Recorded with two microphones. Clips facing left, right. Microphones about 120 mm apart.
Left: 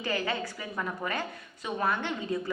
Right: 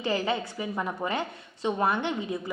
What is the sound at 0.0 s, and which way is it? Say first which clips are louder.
A woman's voice: right 3 dB; 25° right (ahead or behind).